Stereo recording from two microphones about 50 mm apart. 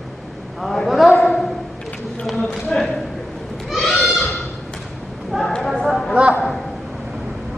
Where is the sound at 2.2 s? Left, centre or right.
Centre.